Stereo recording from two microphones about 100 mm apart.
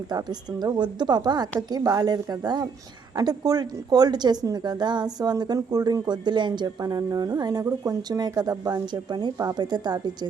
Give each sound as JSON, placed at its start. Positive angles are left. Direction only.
{"t": 0.1, "sound": "a woman's voice", "side_deg": -45}